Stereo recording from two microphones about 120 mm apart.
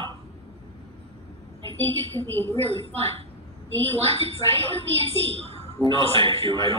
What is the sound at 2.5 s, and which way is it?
Speech, 60° right (ahead or behind).